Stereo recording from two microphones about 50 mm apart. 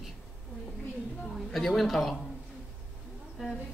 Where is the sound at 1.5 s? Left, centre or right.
Centre.